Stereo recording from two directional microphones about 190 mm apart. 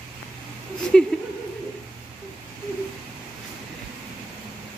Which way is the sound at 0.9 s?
5° left (ahead or behind).